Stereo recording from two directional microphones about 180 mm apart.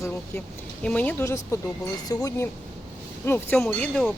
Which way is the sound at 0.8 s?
5° left (ahead or behind).